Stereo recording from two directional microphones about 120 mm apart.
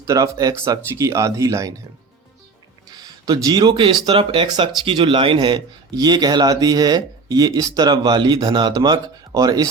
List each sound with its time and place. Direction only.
0.0 s speech: 30° right (ahead or behind)
2.9 s speech: 35° right (ahead or behind)